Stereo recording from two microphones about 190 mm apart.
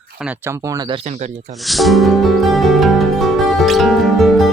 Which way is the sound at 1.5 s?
Centre (ahead or behind).